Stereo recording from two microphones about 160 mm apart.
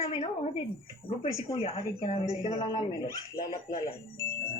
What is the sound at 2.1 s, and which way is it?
Speech, 40° left (ahead or behind).